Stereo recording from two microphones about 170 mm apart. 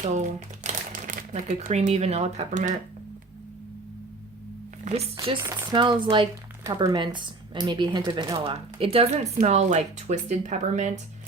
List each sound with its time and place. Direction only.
0.0 s speech: 45° right (ahead or behind)
4.9 s speech: 40° right (ahead or behind)
5.4 s speech: 15° right (ahead or behind)
5.7 s speech: 25° right (ahead or behind); by 11.0 s 45° right (ahead or behind)